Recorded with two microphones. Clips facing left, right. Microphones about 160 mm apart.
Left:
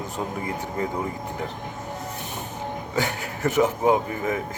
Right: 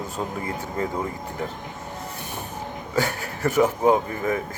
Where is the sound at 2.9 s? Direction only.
20° left (ahead or behind).